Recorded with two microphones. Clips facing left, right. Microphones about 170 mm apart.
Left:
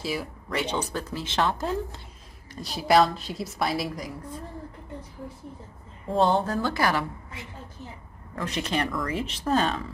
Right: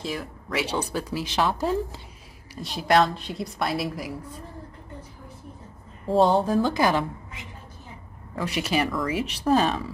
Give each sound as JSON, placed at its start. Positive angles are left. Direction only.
{"t": 0.0, "sound": "speech", "side_deg": 5}
{"t": 0.6, "sound": "a woman's voice", "side_deg": -10}
{"t": 2.5, "sound": "a woman's voice", "side_deg": 0}
{"t": 6.1, "sound": "a woman's voice", "side_deg": -10}
{"t": 8.4, "sound": "a woman's voice", "side_deg": -10}